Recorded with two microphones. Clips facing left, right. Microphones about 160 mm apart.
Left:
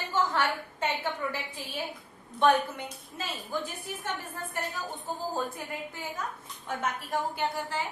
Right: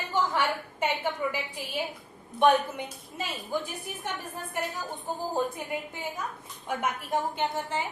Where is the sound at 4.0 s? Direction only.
15° right (ahead or behind).